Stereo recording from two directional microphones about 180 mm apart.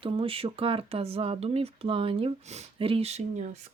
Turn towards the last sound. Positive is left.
turn(degrees=-40)  # may be behind; listen again after turning